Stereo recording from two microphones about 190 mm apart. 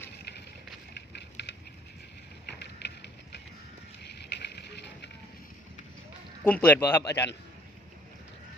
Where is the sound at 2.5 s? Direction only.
60° left (ahead or behind).